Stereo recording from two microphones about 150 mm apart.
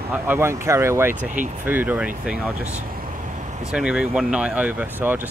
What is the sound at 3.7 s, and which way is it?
Speech, 5° right (ahead or behind).